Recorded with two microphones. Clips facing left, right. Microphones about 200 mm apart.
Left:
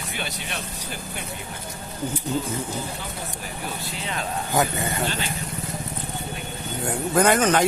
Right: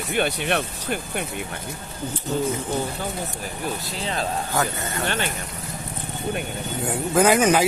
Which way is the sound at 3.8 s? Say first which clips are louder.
Right 3 dB; 35° right (ahead or behind).